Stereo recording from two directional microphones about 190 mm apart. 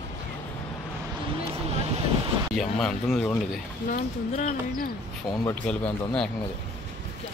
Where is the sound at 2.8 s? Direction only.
5° left (ahead or behind).